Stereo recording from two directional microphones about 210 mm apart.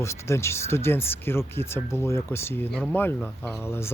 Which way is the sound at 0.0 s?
15° left (ahead or behind).